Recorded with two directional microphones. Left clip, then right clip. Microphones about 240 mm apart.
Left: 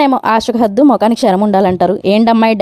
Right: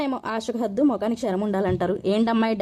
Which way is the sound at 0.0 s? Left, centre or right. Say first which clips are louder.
Left 16 dB; left.